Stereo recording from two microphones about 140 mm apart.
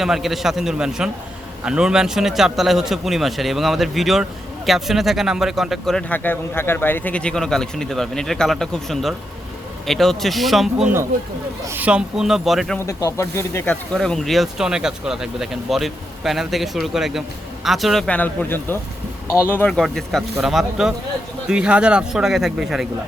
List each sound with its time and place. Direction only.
0.0 s a man's voice: centre (ahead or behind)
11.6 s a man's voice: 15° right (ahead or behind)
12.8 s speech: 25° left (ahead or behind)
13.9 s a man's voice: 5° left (ahead or behind)